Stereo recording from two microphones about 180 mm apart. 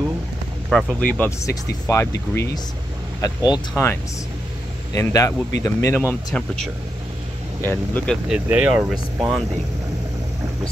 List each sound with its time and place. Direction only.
0.7 s speech: centre (ahead or behind)
8.3 s speech: 5° right (ahead or behind)